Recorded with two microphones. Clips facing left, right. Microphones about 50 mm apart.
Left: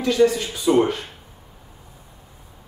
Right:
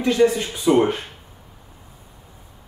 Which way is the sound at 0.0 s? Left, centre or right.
Right.